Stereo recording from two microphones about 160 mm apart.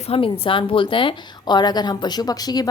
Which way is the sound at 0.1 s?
35° left (ahead or behind).